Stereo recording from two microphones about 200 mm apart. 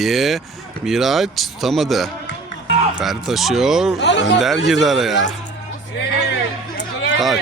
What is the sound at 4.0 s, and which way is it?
Speech, 60° left (ahead or behind).